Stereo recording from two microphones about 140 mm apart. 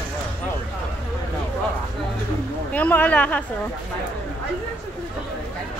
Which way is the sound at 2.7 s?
10° left (ahead or behind).